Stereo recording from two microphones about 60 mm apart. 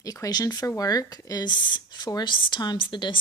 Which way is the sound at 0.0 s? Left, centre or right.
Left.